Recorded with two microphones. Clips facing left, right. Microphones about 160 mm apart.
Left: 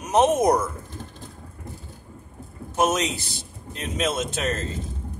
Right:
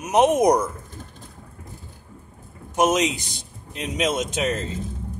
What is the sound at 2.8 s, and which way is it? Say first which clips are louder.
A man's voice: right 3 dB; 15° right (ahead or behind).